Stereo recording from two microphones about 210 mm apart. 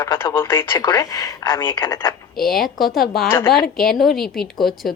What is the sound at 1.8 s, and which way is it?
Speech, 20° left (ahead or behind).